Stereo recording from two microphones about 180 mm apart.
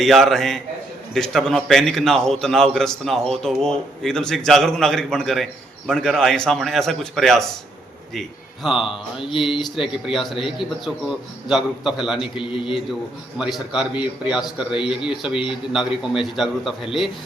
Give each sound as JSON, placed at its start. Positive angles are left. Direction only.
{"t": 0.0, "sound": "a man's voice", "side_deg": 0}
{"t": 12.4, "sound": "a man's voice", "side_deg": 30}
{"t": 13.4, "sound": "a man's voice", "side_deg": -5}
{"t": 15.3, "sound": "a man's voice", "side_deg": 30}
{"t": 15.7, "sound": "a man's voice", "side_deg": -5}